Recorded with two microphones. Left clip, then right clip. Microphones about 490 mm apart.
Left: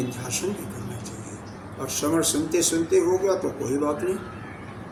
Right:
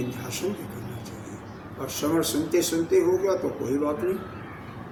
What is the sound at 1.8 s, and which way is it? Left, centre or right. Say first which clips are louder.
A man's voice: left 2 dB; right.